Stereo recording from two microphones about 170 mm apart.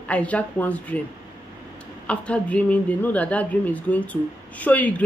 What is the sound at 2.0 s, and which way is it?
Speech, 5° left (ahead or behind).